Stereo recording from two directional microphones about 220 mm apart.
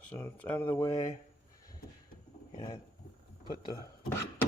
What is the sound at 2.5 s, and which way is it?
Roaring cats, 25° left (ahead or behind).